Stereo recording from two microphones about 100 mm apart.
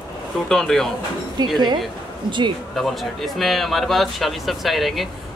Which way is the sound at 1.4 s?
45° right (ahead or behind).